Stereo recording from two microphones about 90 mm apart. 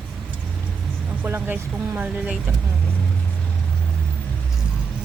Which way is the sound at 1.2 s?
20° right (ahead or behind).